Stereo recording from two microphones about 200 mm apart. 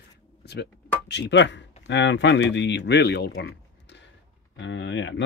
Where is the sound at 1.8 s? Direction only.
60° left (ahead or behind).